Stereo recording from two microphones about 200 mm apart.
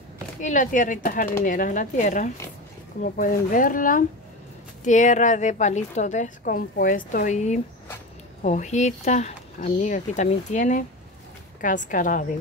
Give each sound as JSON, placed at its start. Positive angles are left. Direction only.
{"t": 0.4, "sound": "a woman's voice", "side_deg": 40}